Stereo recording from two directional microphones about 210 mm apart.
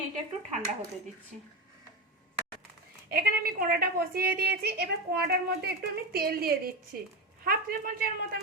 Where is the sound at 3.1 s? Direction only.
45° right (ahead or behind).